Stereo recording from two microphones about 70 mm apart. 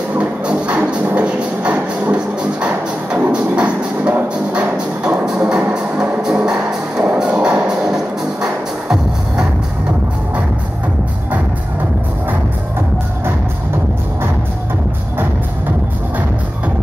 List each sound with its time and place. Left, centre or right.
0.1 s music: centre